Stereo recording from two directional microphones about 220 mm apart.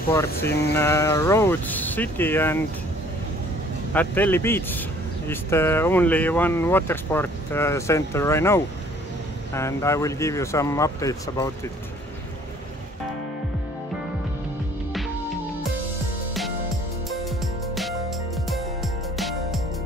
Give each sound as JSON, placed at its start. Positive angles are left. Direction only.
{"t": 0.1, "sound": "speech", "side_deg": 10}
{"t": 3.9, "sound": "speech", "side_deg": 10}
{"t": 18.5, "sound": "music", "side_deg": 0}